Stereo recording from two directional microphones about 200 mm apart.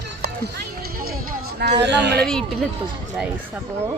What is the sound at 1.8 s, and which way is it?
Speech, 60° right (ahead or behind).